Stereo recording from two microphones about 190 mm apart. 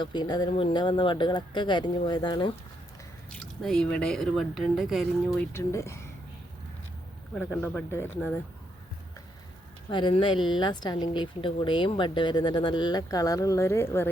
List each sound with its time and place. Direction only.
0.0 s speech: 25° left (ahead or behind)
3.3 s speech: 5° left (ahead or behind)
5.5 s speech: 15° left (ahead or behind)
7.9 s speech: 10° left (ahead or behind)
9.9 s speech: 25° left (ahead or behind)